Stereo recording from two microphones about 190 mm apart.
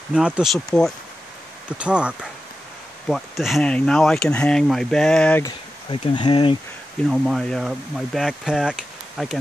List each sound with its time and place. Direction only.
0.1 s speech: 5° right (ahead or behind)
5.9 s speech: 25° left (ahead or behind)
7.1 s speech: centre (ahead or behind)